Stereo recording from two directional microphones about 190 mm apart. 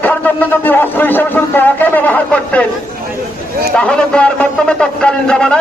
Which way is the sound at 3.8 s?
5° left (ahead or behind).